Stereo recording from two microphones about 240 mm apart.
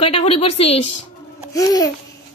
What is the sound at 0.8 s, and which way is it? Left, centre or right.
Speech, left.